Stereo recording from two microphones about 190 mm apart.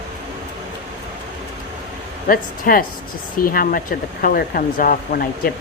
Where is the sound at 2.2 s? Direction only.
45° left (ahead or behind).